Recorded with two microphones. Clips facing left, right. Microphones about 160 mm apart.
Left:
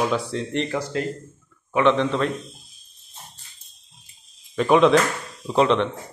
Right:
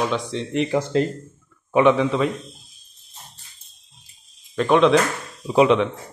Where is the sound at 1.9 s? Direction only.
5° right (ahead or behind).